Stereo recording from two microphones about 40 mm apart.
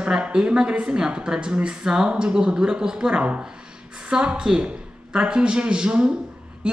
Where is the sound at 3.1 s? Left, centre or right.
Right.